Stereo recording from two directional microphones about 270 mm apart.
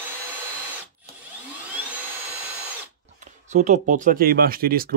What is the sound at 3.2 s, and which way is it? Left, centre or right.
Speech, right.